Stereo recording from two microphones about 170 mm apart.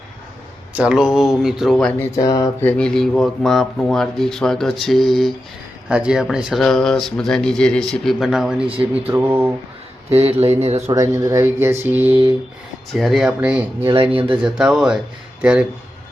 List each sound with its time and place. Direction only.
0.7 s speech: 5° right (ahead or behind)
2.0 s speech: 20° left (ahead or behind); by 9.5 s 15° right (ahead or behind)
10.1 s speech: 35° right (ahead or behind)
10.9 s speech: 15° right (ahead or behind)
12.9 s speech: centre (ahead or behind)
13.9 s speech: 30° right (ahead or behind)
14.4 s speech: 5° right (ahead or behind)